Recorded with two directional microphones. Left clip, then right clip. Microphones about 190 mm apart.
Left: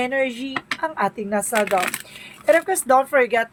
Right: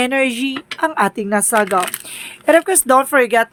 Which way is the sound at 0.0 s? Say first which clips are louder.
Right 6 dB; 50° right (ahead or behind).